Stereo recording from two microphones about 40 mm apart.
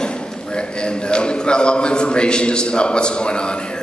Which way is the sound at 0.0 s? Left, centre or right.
Left.